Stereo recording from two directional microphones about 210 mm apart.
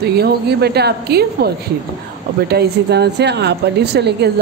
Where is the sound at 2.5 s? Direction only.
50° right (ahead or behind).